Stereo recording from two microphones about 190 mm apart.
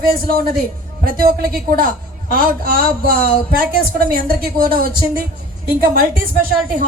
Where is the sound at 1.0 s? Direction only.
50° right (ahead or behind).